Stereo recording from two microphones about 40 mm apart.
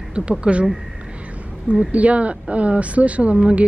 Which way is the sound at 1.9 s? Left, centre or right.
Right.